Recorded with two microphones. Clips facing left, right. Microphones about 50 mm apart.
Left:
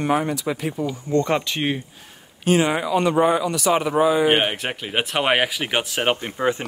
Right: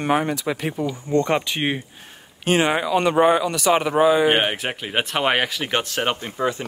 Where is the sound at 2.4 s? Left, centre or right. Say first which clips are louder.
Even; right.